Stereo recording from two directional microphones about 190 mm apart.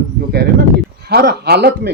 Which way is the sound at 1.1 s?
55° right (ahead or behind).